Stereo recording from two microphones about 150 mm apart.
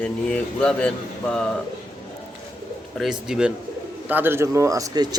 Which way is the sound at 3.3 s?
5° right (ahead or behind).